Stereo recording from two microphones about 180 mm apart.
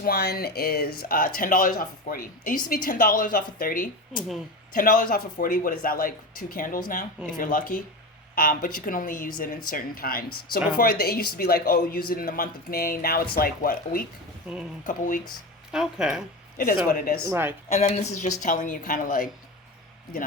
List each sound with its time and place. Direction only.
0.0 s a man's voice: 65° left (ahead or behind)
14.4 s speech: 5° right (ahead or behind)
14.8 s speech: 45° left (ahead or behind)
15.7 s speech: 5° right (ahead or behind)
16.6 s speech: 50° left (ahead or behind)
17.2 s speech: 10° right (ahead or behind)
17.7 s speech: 40° left (ahead or behind)